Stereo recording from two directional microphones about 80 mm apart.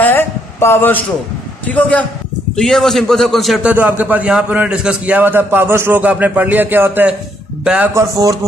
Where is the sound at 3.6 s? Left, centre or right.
Right.